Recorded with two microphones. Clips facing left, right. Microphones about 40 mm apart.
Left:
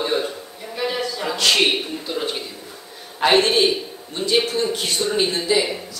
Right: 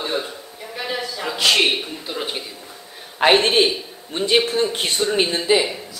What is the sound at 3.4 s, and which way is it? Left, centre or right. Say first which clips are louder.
A man's voice: even; right.